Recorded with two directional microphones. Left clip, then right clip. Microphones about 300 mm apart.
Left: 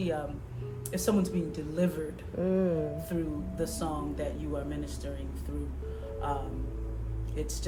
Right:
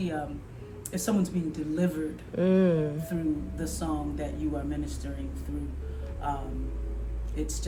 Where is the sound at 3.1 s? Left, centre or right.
Centre.